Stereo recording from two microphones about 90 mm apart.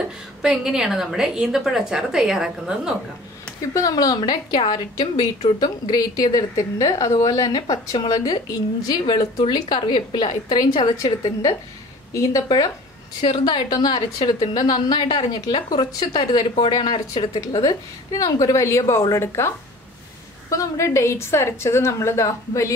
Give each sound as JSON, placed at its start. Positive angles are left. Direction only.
{"t": 0.4, "sound": "a woman's voice", "side_deg": -5}
{"t": 3.7, "sound": "a woman's voice", "side_deg": 45}
{"t": 13.2, "sound": "a woman's voice", "side_deg": 55}